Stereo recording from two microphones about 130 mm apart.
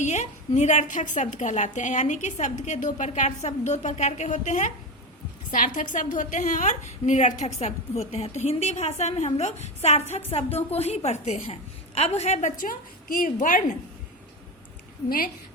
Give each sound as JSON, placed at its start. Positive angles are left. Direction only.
{"t": 0.0, "sound": "a woman's voice", "side_deg": 65}
{"t": 5.5, "sound": "a woman's voice", "side_deg": 90}